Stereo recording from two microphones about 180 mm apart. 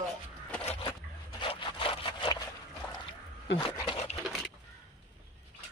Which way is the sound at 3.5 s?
30° left (ahead or behind).